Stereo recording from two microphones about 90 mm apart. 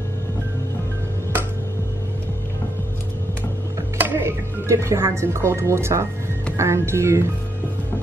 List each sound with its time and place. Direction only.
4.0 s speech: 25° right (ahead or behind)